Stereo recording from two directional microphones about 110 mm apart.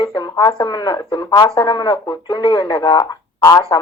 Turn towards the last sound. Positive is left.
turn(degrees=35)  # may be behind; listen again after turning